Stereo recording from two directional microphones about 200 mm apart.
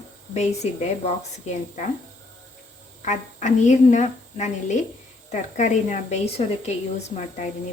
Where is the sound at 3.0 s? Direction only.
35° left (ahead or behind).